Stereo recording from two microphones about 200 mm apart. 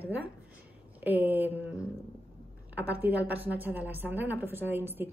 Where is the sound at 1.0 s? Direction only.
10° right (ahead or behind).